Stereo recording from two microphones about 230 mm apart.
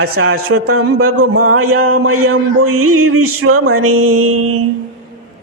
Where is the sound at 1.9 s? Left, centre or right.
Right.